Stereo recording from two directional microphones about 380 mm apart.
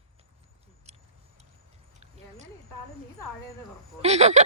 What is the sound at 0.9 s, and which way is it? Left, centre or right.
Vehicle, centre.